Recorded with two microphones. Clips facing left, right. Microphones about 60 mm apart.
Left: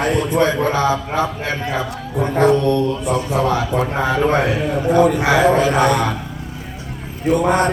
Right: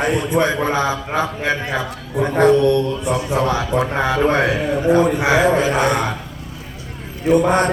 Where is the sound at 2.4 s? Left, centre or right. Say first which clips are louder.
Right 2 dB; left.